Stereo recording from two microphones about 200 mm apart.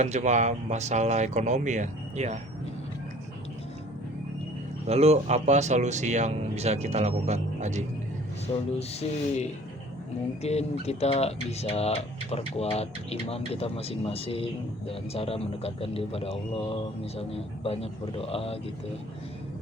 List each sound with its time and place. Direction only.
0.0 s a man's voice: 35° right (ahead or behind)
4.9 s a man's voice: 30° right (ahead or behind)
8.8 s speech: 35° left (ahead or behind)